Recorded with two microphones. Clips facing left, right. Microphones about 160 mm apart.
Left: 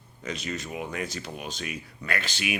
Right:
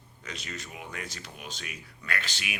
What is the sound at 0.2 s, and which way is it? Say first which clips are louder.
Speech: left 7 dB; 20° left (ahead or behind).